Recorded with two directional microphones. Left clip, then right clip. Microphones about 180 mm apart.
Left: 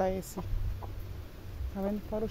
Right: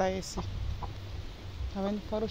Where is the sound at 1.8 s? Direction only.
Centre (ahead or behind).